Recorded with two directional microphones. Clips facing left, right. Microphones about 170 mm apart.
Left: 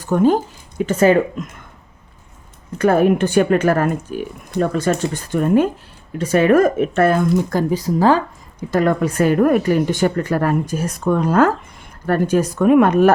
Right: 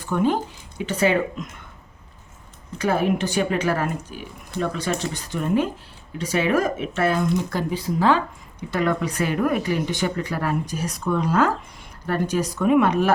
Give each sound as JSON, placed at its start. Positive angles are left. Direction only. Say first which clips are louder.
{"t": 0.0, "sound": "speech", "louder": "left 7 dB", "side_deg": 40}
{"t": 2.7, "sound": "speech", "louder": "left 7 dB", "side_deg": 50}